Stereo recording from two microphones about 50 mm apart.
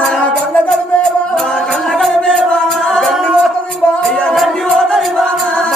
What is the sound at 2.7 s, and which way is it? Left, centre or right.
A capella, centre.